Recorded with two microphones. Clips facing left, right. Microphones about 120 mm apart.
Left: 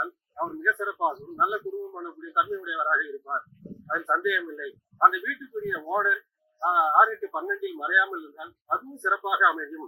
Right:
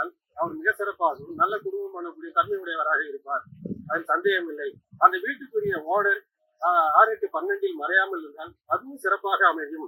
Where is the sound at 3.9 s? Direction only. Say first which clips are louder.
Right 1 dB; 20° right (ahead or behind).